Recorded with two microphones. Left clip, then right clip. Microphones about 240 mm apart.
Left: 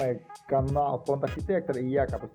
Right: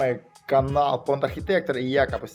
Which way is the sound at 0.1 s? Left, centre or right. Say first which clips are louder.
Right 5 dB; centre.